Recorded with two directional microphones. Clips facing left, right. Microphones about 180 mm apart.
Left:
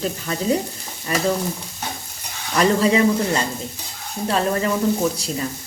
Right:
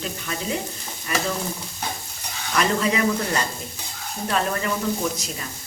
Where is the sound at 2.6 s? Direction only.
30° left (ahead or behind).